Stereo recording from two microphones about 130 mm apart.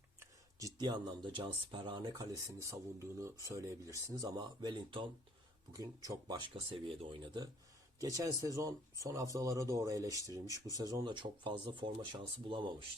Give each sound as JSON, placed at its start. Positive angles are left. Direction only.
{"t": 0.8, "sound": "speech", "side_deg": -35}
{"t": 5.7, "sound": "speech", "side_deg": -25}
{"t": 7.9, "sound": "speech", "side_deg": -25}